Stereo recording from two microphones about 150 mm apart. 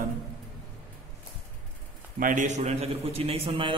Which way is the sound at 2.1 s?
60° right (ahead or behind).